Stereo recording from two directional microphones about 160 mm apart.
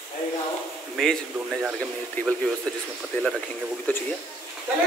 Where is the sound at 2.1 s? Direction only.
5° left (ahead or behind).